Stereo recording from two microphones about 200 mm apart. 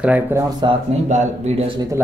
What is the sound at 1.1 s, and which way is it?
Speech, 35° right (ahead or behind).